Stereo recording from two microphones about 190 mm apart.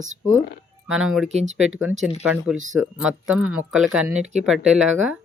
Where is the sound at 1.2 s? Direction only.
35° right (ahead or behind).